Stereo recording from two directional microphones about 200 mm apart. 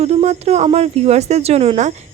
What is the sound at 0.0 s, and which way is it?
Speech, 30° right (ahead or behind).